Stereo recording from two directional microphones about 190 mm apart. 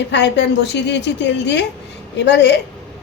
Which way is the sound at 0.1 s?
65° left (ahead or behind).